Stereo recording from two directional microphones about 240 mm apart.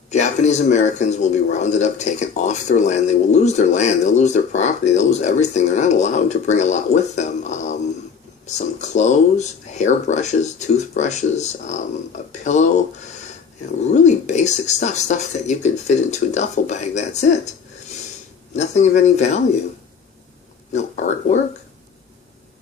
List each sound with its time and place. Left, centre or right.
0.1 s speech: left
13.9 s speech: left
18.5 s speech: left
20.7 s speech: left